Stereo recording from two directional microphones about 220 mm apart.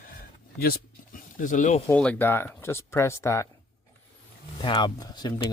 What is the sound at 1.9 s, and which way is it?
Speech, 5° left (ahead or behind).